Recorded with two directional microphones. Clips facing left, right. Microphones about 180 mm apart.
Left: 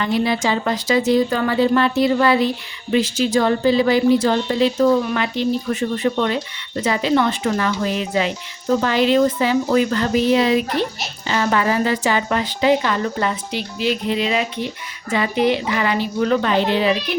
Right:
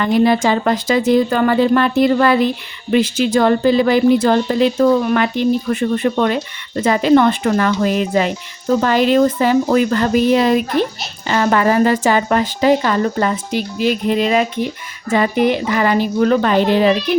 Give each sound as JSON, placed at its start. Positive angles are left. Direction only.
{"t": 0.0, "sound": "a woman's voice", "side_deg": -50}